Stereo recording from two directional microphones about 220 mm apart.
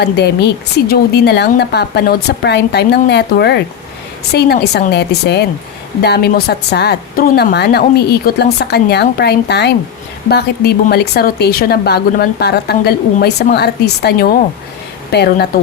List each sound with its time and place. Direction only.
0.0 s speech: 45° left (ahead or behind)